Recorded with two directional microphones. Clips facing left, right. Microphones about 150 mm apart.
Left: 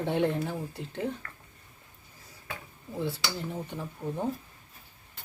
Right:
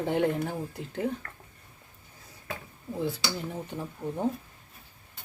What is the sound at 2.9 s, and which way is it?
Speech, 15° right (ahead or behind).